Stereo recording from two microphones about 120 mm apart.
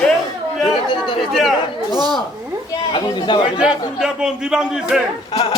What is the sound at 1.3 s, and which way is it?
Chatter, centre (ahead or behind).